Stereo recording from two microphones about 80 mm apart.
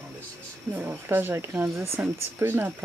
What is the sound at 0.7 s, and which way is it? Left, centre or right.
Speech, right.